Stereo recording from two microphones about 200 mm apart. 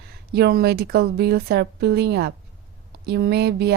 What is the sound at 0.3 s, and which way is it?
A woman's voice, 55° right (ahead or behind).